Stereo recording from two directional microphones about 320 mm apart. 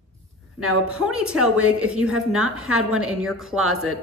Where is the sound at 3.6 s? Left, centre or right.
Right.